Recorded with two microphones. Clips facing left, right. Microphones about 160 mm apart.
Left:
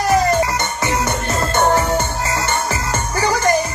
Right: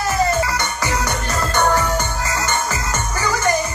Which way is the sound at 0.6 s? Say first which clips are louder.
Left 2 dB; 25° left (ahead or behind).